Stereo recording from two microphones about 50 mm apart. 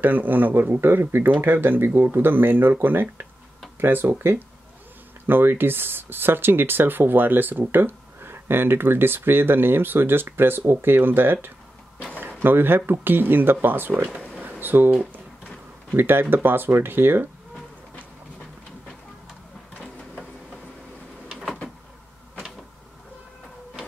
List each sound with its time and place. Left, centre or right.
0.0 s speech: right
12.4 s speech: right
14.4 s a sound: right
15.9 s speech: right